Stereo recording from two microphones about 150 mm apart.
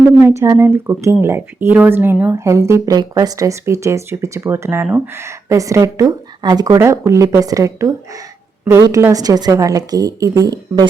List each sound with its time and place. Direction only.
0.0 s speech: 15° right (ahead or behind)